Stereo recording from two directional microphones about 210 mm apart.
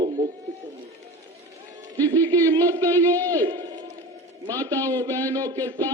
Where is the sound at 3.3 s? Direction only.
20° right (ahead or behind).